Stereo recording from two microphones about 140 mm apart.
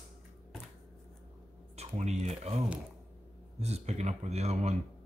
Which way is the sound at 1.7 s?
50° right (ahead or behind).